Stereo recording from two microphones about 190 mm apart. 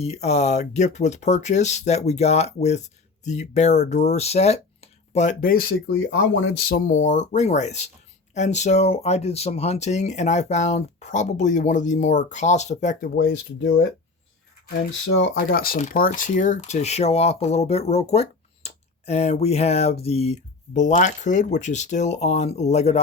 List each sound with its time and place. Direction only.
0.0 s speech: 35° left (ahead or behind)
13.1 s speech: 60° left (ahead or behind)
15.4 s speech: 50° left (ahead or behind); by 23.0 s 35° left (ahead or behind)